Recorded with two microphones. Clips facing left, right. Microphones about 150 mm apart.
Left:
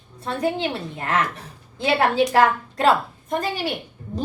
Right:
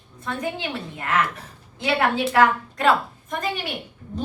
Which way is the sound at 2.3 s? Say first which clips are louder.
Left 1 dB; 35° left (ahead or behind).